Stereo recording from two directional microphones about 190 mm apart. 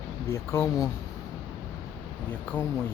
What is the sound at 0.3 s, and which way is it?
Speech, 15° left (ahead or behind).